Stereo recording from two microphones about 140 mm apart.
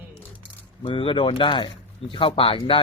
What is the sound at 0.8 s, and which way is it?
Speech, 40° left (ahead or behind).